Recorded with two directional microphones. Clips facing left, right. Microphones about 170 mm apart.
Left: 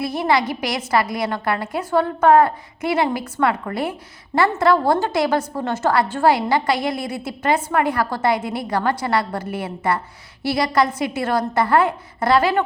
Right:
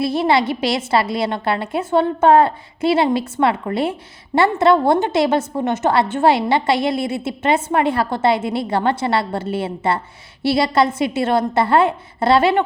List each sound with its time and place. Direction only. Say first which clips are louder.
0.0 s a woman's voice: right 3 dB; 25° right (ahead or behind)